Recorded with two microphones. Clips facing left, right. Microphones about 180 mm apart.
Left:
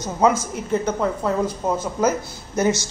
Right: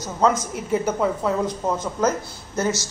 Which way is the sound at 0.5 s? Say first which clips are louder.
Even; 5° right (ahead or behind).